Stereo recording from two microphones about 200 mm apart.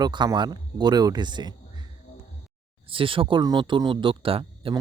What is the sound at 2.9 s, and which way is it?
Speech, 25° right (ahead or behind).